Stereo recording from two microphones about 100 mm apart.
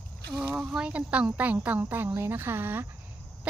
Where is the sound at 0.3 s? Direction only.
10° right (ahead or behind).